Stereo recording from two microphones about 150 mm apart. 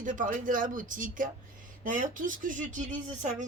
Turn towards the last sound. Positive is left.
turn(degrees=-55)  # may be behind; listen again after turning